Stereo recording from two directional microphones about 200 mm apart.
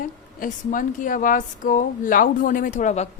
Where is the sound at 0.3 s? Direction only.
45° left (ahead or behind).